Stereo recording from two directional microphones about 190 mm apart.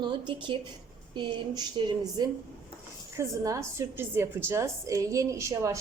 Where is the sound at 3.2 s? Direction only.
15° right (ahead or behind).